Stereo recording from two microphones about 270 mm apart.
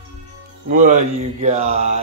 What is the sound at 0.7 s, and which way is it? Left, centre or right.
Speech, right.